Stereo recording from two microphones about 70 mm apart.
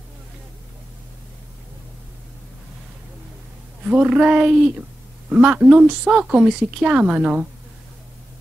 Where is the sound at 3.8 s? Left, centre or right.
Centre.